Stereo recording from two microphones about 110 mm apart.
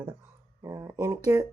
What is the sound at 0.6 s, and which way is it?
Speech, 30° right (ahead or behind).